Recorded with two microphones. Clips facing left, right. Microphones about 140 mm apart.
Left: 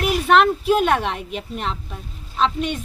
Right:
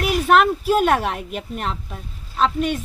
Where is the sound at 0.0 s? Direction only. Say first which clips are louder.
Even; centre (ahead or behind).